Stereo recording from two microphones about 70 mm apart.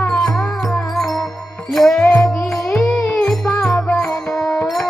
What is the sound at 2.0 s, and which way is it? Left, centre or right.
Music, left.